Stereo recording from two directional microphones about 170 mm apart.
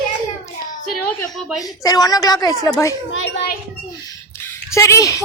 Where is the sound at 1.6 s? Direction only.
20° left (ahead or behind).